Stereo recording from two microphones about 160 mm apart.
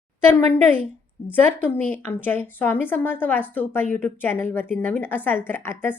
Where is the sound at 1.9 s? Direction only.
10° left (ahead or behind).